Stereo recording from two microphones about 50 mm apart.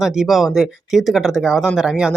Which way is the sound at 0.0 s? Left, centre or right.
Centre.